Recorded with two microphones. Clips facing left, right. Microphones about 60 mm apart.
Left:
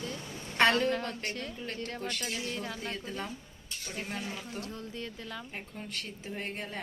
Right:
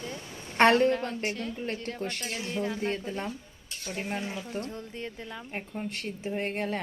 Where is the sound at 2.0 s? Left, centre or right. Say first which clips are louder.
Right 1 dB; right.